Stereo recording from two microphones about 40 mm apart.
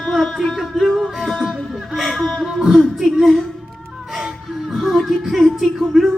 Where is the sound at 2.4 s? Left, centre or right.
Centre.